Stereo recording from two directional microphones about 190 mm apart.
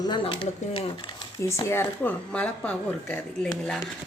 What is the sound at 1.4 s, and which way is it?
Speech, 15° left (ahead or behind).